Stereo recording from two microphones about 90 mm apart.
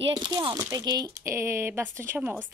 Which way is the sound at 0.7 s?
45° right (ahead or behind).